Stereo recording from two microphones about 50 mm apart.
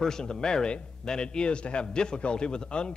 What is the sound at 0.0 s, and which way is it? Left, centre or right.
Speech, centre.